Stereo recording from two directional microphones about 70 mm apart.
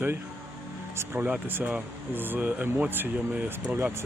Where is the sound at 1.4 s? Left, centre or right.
Right.